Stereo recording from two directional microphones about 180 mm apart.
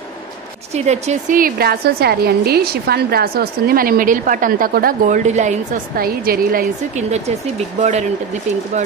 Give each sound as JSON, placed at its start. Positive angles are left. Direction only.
{"t": 0.7, "sound": "a woman's voice", "side_deg": -40}